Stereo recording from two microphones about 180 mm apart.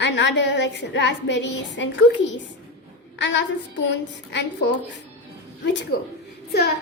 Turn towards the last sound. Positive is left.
turn(degrees=60)  # may be behind; listen again after turning